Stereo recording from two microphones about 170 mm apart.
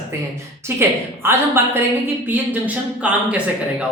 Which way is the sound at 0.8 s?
15° right (ahead or behind).